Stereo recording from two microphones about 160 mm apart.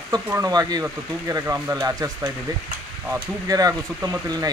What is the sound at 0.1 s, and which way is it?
Speech, 20° right (ahead or behind).